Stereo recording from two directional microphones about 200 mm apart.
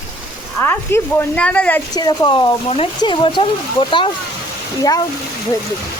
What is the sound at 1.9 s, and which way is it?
Speech, 20° left (ahead or behind).